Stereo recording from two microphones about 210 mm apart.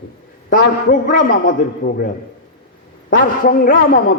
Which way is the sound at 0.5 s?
40° left (ahead or behind).